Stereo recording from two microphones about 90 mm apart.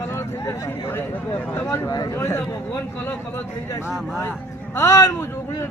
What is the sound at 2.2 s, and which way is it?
Speech, 35° left (ahead or behind).